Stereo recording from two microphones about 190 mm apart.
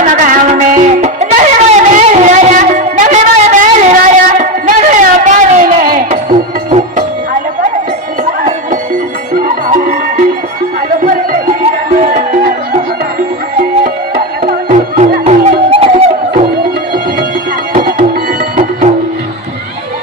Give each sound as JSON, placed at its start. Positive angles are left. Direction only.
{"t": 0.0, "sound": "music", "side_deg": -45}
{"t": 8.2, "sound": "music", "side_deg": -45}
{"t": 11.0, "sound": "a sound", "side_deg": -45}
{"t": 11.9, "sound": "music", "side_deg": -45}
{"t": 14.4, "sound": "music", "side_deg": -40}
{"t": 17.7, "sound": "music", "side_deg": -50}